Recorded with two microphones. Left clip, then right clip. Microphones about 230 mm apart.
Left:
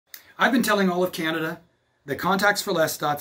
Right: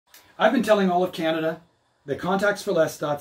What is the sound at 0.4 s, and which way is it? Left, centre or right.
Speech, centre.